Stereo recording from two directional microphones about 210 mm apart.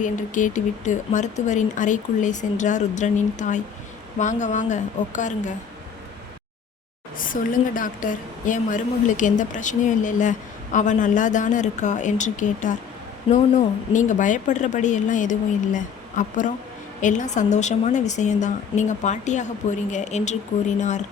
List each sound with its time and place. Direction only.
0.0 s a woman's voice: 35° left (ahead or behind)
7.2 s a woman's voice: 40° left (ahead or behind)